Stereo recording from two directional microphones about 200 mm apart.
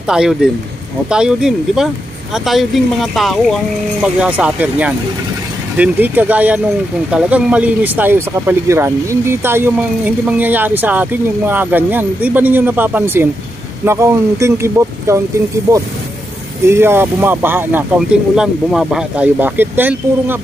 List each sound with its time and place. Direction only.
0.1 s speech: 5° right (ahead or behind)
16.6 s speech: 10° right (ahead or behind)